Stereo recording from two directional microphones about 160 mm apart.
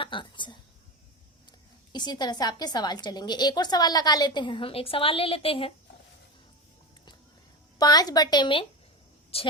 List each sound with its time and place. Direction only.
0.0 s a woman's voice: 30° left (ahead or behind)
1.9 s a woman's voice: 25° left (ahead or behind)
7.8 s a woman's voice: 25° left (ahead or behind)